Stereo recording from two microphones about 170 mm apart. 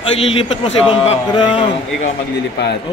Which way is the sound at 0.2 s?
35° left (ahead or behind).